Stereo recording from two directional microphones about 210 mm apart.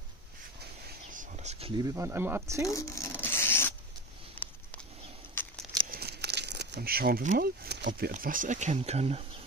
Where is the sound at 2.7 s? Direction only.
15° left (ahead or behind).